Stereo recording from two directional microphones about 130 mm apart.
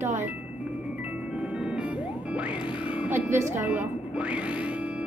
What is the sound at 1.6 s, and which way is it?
Music, 10° right (ahead or behind).